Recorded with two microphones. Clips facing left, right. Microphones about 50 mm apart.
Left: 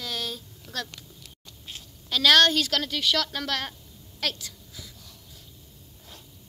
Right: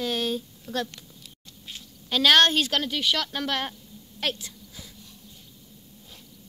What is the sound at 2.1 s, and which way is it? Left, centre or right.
Speech, right.